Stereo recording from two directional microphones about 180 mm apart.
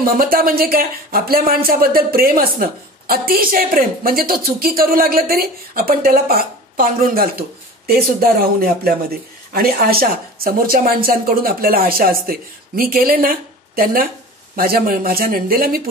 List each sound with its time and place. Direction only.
0.0 s speech: 55° right (ahead or behind)